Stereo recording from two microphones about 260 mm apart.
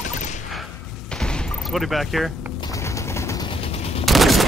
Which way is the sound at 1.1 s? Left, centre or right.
Centre.